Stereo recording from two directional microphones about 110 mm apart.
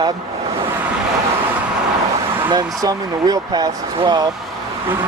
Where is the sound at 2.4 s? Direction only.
35° right (ahead or behind).